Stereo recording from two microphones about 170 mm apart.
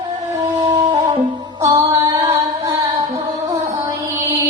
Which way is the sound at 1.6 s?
20° right (ahead or behind).